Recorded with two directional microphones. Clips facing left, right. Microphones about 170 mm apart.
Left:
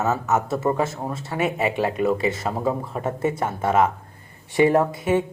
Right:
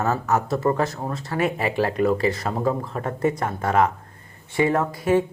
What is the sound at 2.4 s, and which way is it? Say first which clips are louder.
Speech: even; 5° left (ahead or behind).